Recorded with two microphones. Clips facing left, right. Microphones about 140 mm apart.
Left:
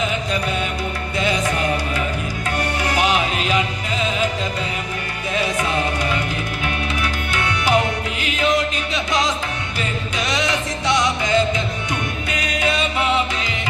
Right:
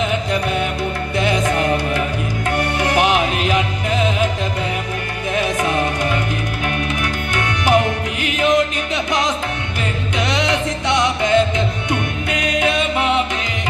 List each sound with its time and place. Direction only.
1.1 s music: 55° right (ahead or behind)
5.3 s music: 50° right (ahead or behind)